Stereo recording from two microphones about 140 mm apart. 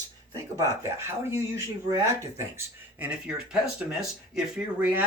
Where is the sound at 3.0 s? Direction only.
5° right (ahead or behind).